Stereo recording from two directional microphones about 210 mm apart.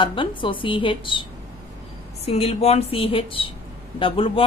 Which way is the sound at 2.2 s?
30° left (ahead or behind).